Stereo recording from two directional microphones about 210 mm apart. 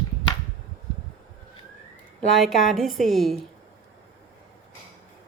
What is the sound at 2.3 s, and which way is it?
A woman's voice, centre (ahead or behind).